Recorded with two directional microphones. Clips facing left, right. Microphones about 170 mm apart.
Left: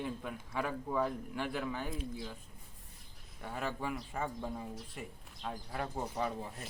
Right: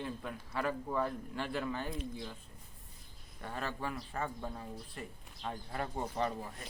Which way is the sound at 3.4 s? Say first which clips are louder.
Left 1 dB; 10° left (ahead or behind).